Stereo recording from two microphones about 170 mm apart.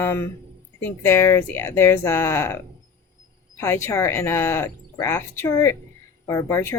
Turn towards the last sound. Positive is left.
turn(degrees=15)  # may be behind; listen again after turning